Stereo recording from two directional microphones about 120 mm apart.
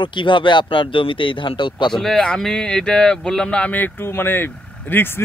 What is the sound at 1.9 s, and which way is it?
Speech, 5° left (ahead or behind).